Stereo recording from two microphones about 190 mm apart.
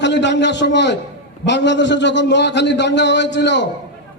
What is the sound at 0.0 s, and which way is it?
A man's voice, 65° left (ahead or behind).